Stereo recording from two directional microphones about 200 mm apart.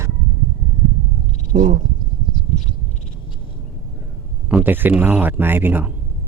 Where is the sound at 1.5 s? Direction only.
40° right (ahead or behind).